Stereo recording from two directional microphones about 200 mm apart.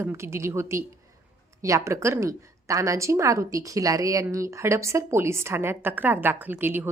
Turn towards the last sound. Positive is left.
turn(degrees=-10)  # may be behind; listen again after turning